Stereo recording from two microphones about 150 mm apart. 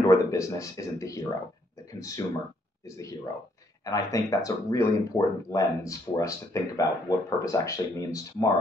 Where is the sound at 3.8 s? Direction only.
25° left (ahead or behind).